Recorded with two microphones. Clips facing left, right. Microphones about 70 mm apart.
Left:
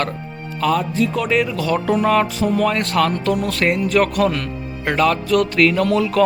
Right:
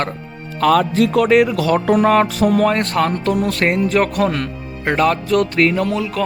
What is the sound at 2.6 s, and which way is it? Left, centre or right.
Speech, right.